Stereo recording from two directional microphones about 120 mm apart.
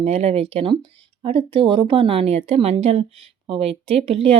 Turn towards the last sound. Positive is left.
turn(degrees=-55)  # may be behind; listen again after turning